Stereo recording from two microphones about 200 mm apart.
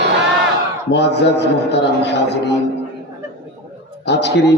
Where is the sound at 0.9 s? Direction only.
60° left (ahead or behind).